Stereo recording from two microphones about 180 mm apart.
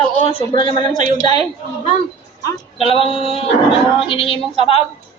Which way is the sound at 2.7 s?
30° left (ahead or behind).